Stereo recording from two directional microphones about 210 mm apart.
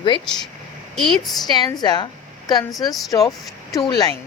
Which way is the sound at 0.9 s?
Centre (ahead or behind).